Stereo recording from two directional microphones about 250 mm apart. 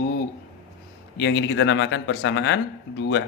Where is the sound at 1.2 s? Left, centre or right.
Left.